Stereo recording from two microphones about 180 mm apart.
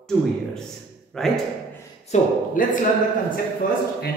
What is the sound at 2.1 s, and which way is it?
Speech, 40° left (ahead or behind).